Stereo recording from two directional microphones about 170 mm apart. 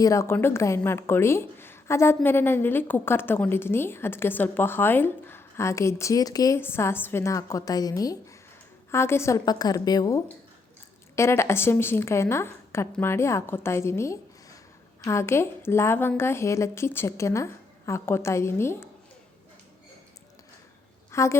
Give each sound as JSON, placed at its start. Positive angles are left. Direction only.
{"t": 0.0, "sound": "a woman's voice", "side_deg": 20}
{"t": 21.1, "sound": "speech", "side_deg": 15}